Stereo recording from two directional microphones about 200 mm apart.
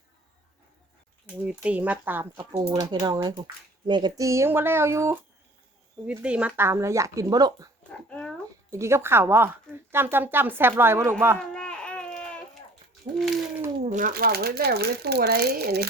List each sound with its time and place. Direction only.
1.4 s speech: 5° right (ahead or behind)
2.4 s speech: 20° right (ahead or behind)
7.9 s speech: 5° left (ahead or behind)
8.7 s speech: 15° right (ahead or behind)
11.3 s baby cry: 5° left (ahead or behind)
13.1 s speech: centre (ahead or behind)
13.8 s speech: 40° right (ahead or behind)